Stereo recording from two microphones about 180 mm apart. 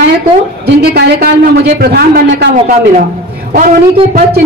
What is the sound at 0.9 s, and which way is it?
A woman's voice, 65° right (ahead or behind).